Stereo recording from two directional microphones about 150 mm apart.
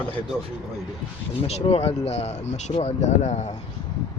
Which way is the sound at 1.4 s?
40° left (ahead or behind).